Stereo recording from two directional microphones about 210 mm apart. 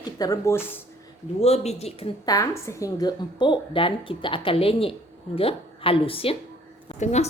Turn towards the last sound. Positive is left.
turn(degrees=30)  # may be behind; listen again after turning